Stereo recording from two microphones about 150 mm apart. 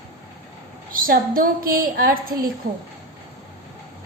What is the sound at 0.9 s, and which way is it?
A woman's voice, 70° right (ahead or behind).